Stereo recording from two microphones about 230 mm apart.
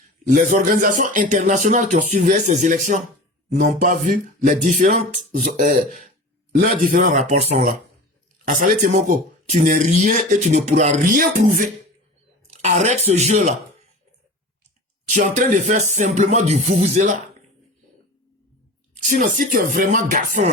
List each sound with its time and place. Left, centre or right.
0.3 s speech: right
15.1 s speech: right
19.0 s speech: right